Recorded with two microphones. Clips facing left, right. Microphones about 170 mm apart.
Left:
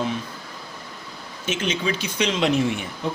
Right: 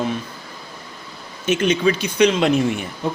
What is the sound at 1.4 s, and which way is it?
Speech, 60° right (ahead or behind).